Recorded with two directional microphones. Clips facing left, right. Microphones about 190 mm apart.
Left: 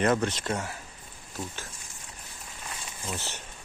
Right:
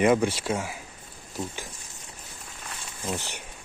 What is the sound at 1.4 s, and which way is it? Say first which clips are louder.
Speech: right 4 dB; 20° right (ahead or behind).